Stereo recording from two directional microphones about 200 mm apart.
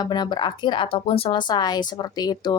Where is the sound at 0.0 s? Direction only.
20° left (ahead or behind).